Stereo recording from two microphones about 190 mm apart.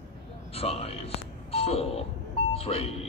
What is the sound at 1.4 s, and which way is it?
Doorbell, 30° left (ahead or behind).